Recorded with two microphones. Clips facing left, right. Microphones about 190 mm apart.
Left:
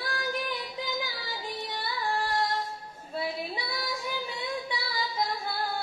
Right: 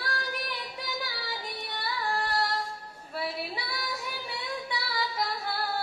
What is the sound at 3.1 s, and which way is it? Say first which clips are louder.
Female singing: left 1 dB; 20° left (ahead or behind).